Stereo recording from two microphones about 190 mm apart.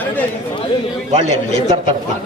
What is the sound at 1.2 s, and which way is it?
Speech, 40° left (ahead or behind).